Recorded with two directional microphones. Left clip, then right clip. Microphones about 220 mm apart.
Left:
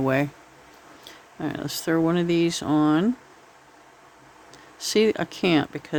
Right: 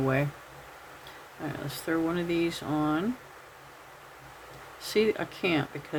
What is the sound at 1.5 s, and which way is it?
Speech, 50° left (ahead or behind).